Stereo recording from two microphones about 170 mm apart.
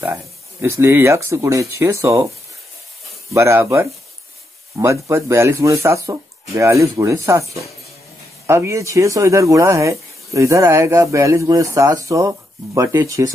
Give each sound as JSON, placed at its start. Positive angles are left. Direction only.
{"t": 0.0, "sound": "speech", "side_deg": -15}
{"t": 3.3, "sound": "speech", "side_deg": -15}
{"t": 8.5, "sound": "speech", "side_deg": -15}